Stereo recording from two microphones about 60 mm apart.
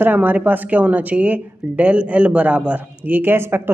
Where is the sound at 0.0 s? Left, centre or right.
Right.